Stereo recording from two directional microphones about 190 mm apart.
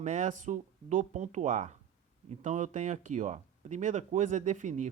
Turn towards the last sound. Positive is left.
turn(degrees=-40)  # may be behind; listen again after turning